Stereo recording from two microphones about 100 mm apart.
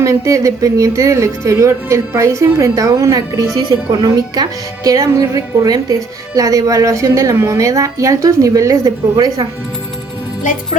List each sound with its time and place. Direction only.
0.0 s a woman's voice: 30° right (ahead or behind)